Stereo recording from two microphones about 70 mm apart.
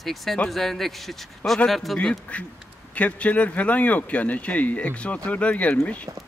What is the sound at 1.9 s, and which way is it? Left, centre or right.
A man's voice, centre.